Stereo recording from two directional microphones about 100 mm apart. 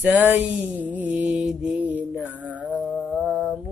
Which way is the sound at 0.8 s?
15° right (ahead or behind).